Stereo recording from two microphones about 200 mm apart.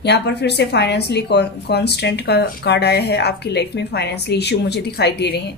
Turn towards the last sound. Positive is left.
turn(degrees=55)  # may be behind; listen again after turning